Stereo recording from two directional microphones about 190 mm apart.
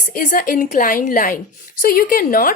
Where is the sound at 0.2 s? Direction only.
45° left (ahead or behind).